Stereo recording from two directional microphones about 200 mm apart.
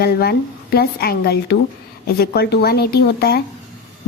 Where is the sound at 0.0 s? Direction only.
50° left (ahead or behind).